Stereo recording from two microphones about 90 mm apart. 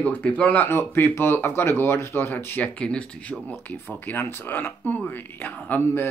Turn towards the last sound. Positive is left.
turn(degrees=30)  # may be behind; listen again after turning